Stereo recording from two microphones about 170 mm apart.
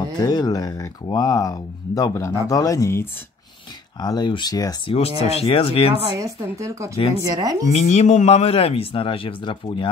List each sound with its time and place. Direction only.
0.2 s speech: 25° left (ahead or behind)
4.9 s speech: 35° left (ahead or behind)
6.1 s speech: 20° right (ahead or behind)
7.7 s speech: 40° left (ahead or behind)